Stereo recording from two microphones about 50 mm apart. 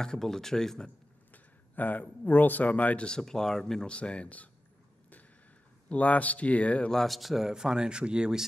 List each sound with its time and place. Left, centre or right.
0.0 s speech: centre
1.3 s speech: left
3.1 s speech: centre
3.8 s speech: left
5.9 s speech: left
6.9 s speech: centre